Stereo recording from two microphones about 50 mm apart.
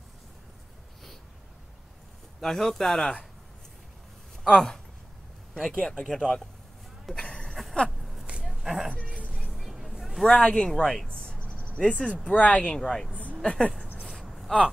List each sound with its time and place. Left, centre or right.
2.4 s speech: centre
4.5 s speech: centre
5.8 s speech: left
6.1 s speech: centre
7.2 s a sound: centre
8.0 s a sound: centre
9.5 s vehicle: centre
10.2 s speech: centre
11.1 s a sound: centre
12.3 s speech: left
12.6 s speech: centre
13.4 s speech: centre
14.2 s a sound: centre